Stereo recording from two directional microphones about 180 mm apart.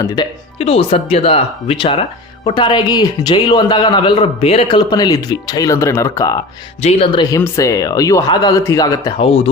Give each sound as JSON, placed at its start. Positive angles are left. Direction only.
{"t": 0.0, "sound": "speech", "side_deg": 20}
{"t": 0.6, "sound": "speech", "side_deg": 35}
{"t": 6.8, "sound": "speech", "side_deg": 30}
{"t": 9.2, "sound": "speech", "side_deg": 30}